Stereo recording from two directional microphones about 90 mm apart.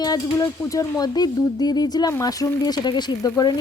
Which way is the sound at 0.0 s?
45° left (ahead or behind).